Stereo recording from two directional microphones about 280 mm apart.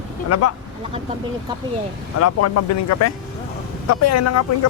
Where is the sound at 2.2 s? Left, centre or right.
Left.